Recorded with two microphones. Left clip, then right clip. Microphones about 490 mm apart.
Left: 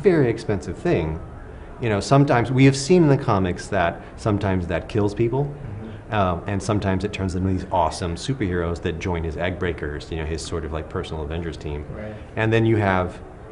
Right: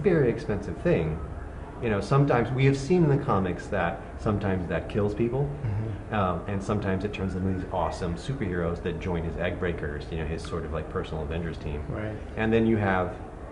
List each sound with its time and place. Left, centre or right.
0.0 s speech: left